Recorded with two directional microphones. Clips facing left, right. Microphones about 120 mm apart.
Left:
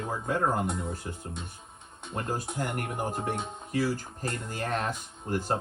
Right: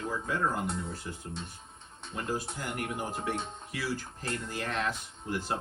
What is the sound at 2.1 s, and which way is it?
Speech, 50° left (ahead or behind).